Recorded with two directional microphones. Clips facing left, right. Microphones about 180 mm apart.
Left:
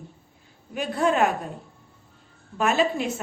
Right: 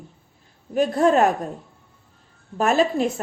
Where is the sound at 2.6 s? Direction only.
40° right (ahead or behind).